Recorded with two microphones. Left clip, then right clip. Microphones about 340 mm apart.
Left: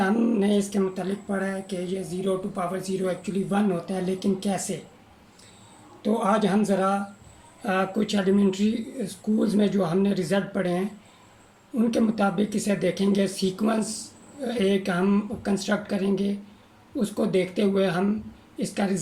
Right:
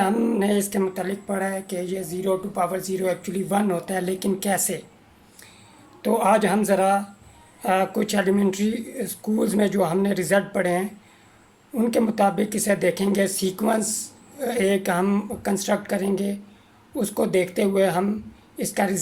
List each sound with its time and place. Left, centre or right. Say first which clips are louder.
0.0 s speech: right 2 dB; right
6.0 s speech: right 4 dB; right
11.9 s a woman's voice: right 5 dB; centre